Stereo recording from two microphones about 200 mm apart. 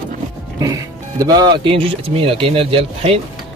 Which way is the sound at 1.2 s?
20° right (ahead or behind).